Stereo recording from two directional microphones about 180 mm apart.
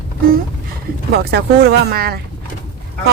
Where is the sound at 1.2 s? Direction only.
60° right (ahead or behind).